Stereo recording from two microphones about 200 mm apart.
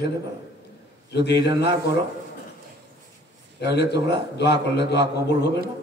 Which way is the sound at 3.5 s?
55° left (ahead or behind).